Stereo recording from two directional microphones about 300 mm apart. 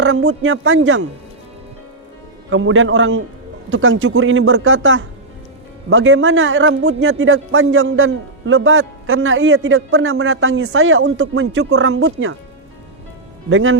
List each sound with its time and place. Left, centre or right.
0.0 s a man's voice: right
2.5 s a man's voice: right
13.5 s a man's voice: right